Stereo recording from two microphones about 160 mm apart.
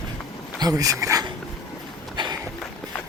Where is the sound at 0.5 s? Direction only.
25° right (ahead or behind).